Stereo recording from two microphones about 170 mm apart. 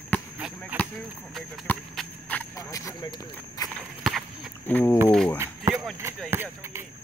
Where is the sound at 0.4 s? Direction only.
5° right (ahead or behind).